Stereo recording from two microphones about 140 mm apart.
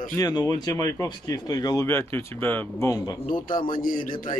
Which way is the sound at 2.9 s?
25° left (ahead or behind).